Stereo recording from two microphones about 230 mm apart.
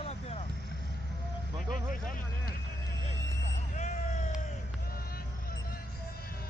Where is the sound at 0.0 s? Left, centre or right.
Left.